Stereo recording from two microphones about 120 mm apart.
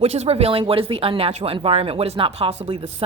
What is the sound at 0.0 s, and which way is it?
Speech, 55° right (ahead or behind).